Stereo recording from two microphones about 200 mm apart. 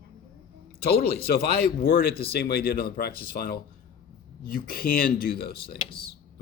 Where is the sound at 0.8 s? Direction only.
50° left (ahead or behind).